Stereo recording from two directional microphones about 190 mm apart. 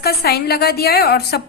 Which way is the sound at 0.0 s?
55° left (ahead or behind).